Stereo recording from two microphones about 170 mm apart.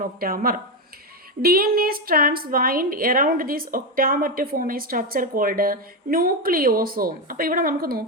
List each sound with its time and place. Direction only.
0.0 s a woman's voice: 55° right (ahead or behind)